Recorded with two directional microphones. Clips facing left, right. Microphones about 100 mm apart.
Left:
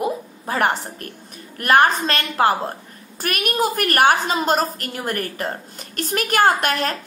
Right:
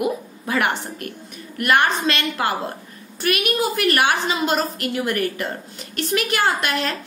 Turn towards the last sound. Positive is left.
turn(degrees=45)  # may be behind; listen again after turning